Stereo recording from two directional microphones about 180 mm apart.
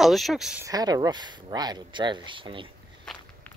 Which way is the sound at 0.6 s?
20° right (ahead or behind).